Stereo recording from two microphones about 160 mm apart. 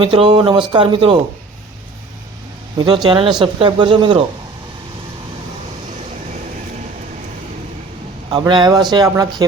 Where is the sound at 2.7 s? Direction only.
30° right (ahead or behind).